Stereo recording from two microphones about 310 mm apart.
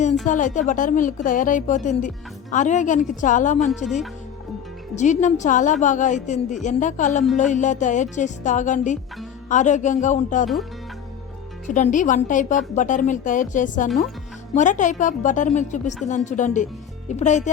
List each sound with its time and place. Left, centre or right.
0.3 s a woman's voice: left
4.9 s a woman's voice: left
11.6 s a woman's voice: left